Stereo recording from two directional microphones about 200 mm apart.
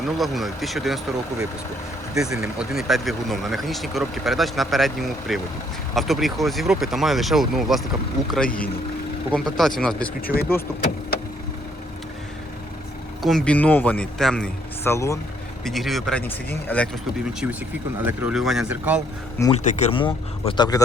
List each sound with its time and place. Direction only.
0.2 s speech: centre (ahead or behind)
9.3 s speech: centre (ahead or behind)
10.2 s speech: 50° left (ahead or behind)
13.2 s speech: 5° left (ahead or behind)
15.6 s speech: centre (ahead or behind)
17.4 s speech: 10° right (ahead or behind)
19.5 s speech: 35° left (ahead or behind)